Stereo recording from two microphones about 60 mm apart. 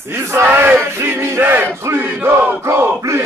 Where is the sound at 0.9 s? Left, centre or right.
Right.